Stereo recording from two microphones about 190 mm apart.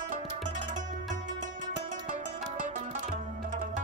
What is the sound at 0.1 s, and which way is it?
Music, 40° right (ahead or behind).